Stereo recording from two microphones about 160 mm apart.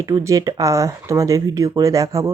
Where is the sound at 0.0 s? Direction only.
20° right (ahead or behind).